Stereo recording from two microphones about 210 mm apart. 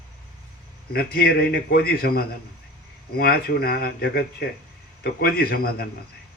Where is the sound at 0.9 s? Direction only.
45° left (ahead or behind).